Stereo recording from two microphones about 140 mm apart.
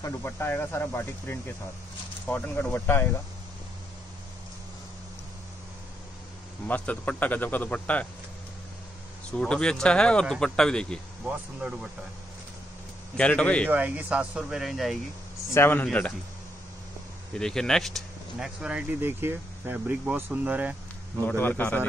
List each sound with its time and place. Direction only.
0.0 s speech: 15° left (ahead or behind)
6.7 s speech: 10° left (ahead or behind)
9.3 s speech: 5° left (ahead or behind)
11.2 s speech: 5° right (ahead or behind)
13.2 s speech: 10° left (ahead or behind)
13.7 s speech: 10° right (ahead or behind)
15.5 s speech: 15° left (ahead or behind)
17.4 s speech: 5° left (ahead or behind)
21.4 s speech: 15° left (ahead or behind)